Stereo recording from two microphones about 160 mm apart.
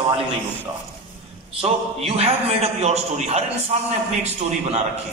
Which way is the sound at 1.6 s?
40° right (ahead or behind).